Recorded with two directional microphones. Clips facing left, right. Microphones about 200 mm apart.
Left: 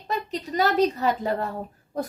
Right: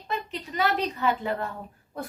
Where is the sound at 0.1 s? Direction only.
40° left (ahead or behind).